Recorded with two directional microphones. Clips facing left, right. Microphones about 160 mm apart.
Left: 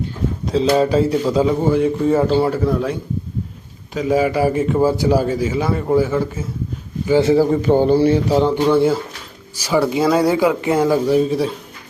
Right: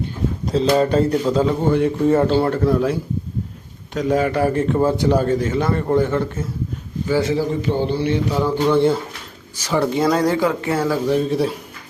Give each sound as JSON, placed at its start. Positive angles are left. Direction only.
{"t": 0.4, "sound": "a man's voice", "side_deg": 0}
{"t": 7.1, "sound": "a man's voice", "side_deg": 25}
{"t": 7.3, "sound": "a sound", "side_deg": 45}
{"t": 8.6, "sound": "speech", "side_deg": 5}
{"t": 11.2, "sound": "a man's voice", "side_deg": 0}